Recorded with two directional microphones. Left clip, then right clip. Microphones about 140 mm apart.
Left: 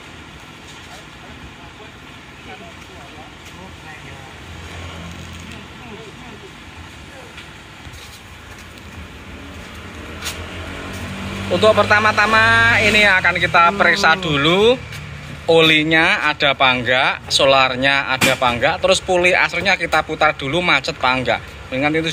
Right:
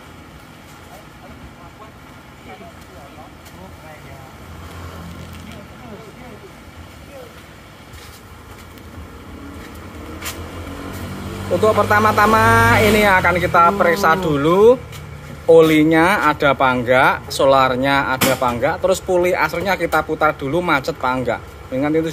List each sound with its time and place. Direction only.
11.5 s speech: 25° right (ahead or behind)